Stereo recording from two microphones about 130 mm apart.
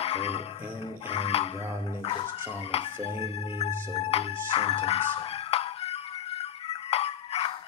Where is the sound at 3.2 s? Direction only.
55° left (ahead or behind).